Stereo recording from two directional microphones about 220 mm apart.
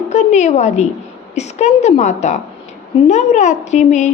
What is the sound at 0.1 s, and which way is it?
A woman's voice, 30° left (ahead or behind).